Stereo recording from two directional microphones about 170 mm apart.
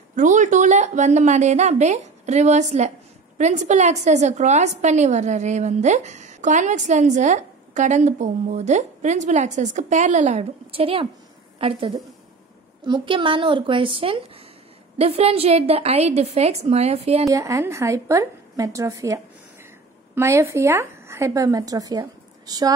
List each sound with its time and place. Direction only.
0.1 s a woman's voice: 45° right (ahead or behind)
12.8 s a woman's voice: 30° right (ahead or behind)
17.3 s a woman's voice: 15° right (ahead or behind)